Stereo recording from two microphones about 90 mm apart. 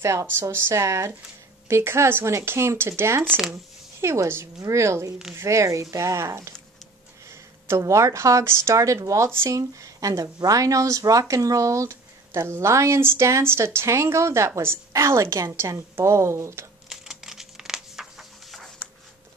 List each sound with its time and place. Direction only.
0.0 s speech: 30° right (ahead or behind)
7.6 s speech: 35° right (ahead or behind)
16.9 s a sound: 5° right (ahead or behind)